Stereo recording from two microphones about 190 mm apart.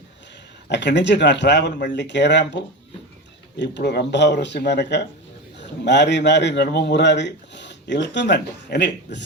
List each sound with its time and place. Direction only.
0.7 s a man's voice: 65° left (ahead or behind)
3.6 s a man's voice: 65° left (ahead or behind)